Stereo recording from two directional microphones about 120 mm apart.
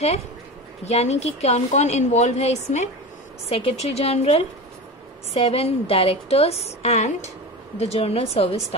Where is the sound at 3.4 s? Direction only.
60° left (ahead or behind).